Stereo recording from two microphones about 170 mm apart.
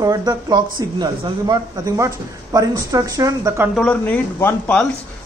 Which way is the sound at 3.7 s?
5° left (ahead or behind).